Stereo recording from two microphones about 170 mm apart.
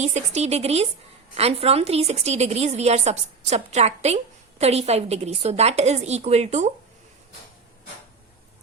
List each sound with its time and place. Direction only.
0.0 s a woman's voice: 40° right (ahead or behind)